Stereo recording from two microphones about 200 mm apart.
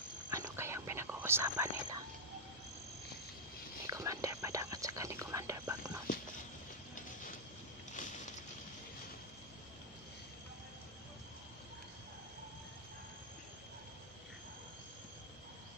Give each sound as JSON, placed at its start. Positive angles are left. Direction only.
{"t": 0.3, "sound": "whispering", "side_deg": -15}
{"t": 3.8, "sound": "whispering", "side_deg": -15}